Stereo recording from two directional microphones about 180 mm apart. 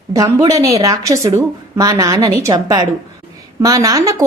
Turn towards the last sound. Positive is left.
turn(degrees=-20)  # may be behind; listen again after turning